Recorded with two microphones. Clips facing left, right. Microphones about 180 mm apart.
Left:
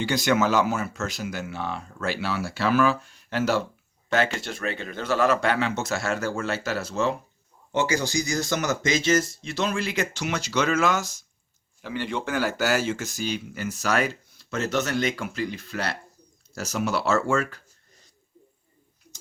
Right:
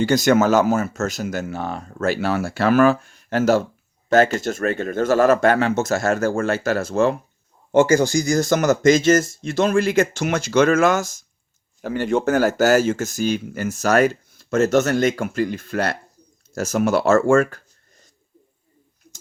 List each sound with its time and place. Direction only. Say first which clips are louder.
0.0 s speech: right 7 dB; 45° right (ahead or behind)